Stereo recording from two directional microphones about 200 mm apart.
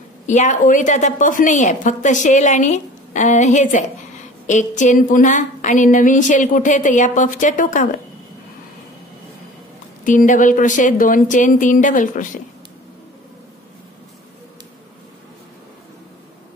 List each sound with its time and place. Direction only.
0.3 s a woman's voice: 40° left (ahead or behind)
10.0 s a woman's voice: 40° left (ahead or behind)